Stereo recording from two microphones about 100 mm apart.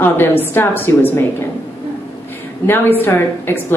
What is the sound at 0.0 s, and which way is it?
A woman's voice, 20° left (ahead or behind).